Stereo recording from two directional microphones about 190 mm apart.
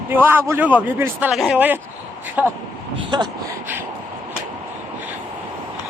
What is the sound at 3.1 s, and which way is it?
Speech, 25° right (ahead or behind).